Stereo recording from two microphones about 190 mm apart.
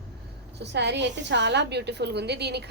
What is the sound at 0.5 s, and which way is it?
A woman's voice, 65° right (ahead or behind).